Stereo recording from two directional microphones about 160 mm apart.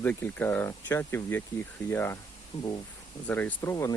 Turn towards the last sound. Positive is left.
turn(degrees=20)  # may be behind; listen again after turning